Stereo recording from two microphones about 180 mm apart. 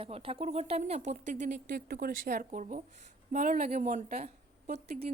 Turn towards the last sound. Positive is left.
turn(degrees=-40)  # may be behind; listen again after turning